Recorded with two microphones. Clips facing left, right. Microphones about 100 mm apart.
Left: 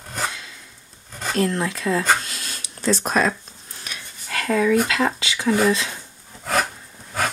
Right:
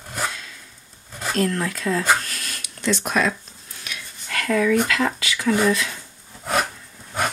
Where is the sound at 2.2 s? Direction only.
25° left (ahead or behind).